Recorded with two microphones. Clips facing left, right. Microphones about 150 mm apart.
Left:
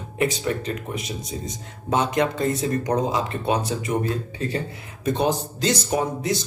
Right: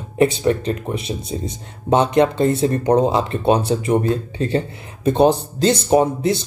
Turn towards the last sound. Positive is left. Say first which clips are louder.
# right 8 dB
turn(degrees=-25)  # may be behind; listen again after turning